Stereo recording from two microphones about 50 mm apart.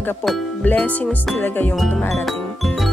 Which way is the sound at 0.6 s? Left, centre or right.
Left.